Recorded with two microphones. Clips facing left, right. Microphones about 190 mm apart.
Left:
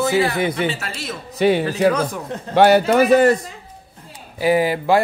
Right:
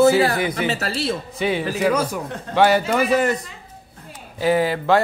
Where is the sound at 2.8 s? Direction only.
40° left (ahead or behind).